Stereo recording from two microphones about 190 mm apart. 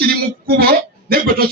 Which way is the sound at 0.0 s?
55° right (ahead or behind).